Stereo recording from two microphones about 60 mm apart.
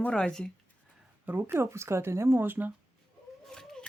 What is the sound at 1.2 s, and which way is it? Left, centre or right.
Speech, right.